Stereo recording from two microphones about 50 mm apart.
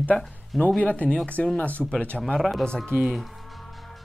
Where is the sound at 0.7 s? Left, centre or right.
Left.